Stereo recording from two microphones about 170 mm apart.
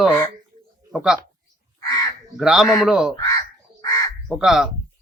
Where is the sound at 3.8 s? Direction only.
20° left (ahead or behind).